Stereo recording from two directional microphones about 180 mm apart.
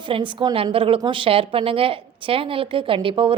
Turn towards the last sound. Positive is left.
turn(degrees=-30)  # may be behind; listen again after turning